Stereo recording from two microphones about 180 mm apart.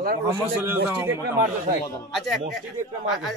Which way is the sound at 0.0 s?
60° right (ahead or behind).